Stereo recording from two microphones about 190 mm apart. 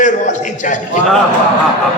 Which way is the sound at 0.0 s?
40° left (ahead or behind).